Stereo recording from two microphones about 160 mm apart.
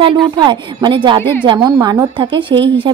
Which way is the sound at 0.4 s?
30° right (ahead or behind).